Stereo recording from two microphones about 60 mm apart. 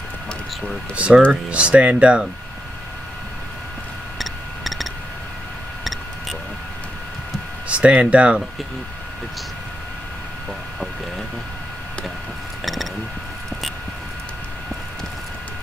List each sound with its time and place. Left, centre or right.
0.9 s speech: centre
4.2 s a sound: centre
7.6 s speech: right